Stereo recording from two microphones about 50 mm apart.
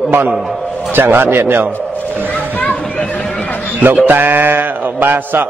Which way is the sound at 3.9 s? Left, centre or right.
Right.